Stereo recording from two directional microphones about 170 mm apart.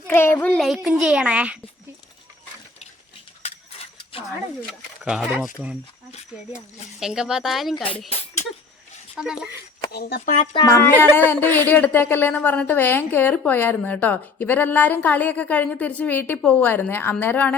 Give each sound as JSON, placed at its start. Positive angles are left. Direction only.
{"t": 0.1, "sound": "a child's voice", "side_deg": 15}
{"t": 5.0, "sound": "a child's voice", "side_deg": -5}
{"t": 7.0, "sound": "a child's voice", "side_deg": -5}
{"t": 9.1, "sound": "a child's voice", "side_deg": -5}
{"t": 9.9, "sound": "speech", "side_deg": 65}
{"t": 10.3, "sound": "speech", "side_deg": 30}
{"t": 10.7, "sound": "speech", "side_deg": 15}